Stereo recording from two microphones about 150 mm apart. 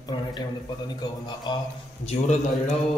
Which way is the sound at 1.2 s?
30° left (ahead or behind).